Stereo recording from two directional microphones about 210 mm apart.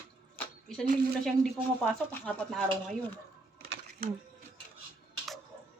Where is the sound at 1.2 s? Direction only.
5° left (ahead or behind).